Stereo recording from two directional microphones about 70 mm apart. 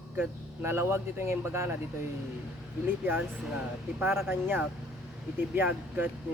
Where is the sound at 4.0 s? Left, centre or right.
Right.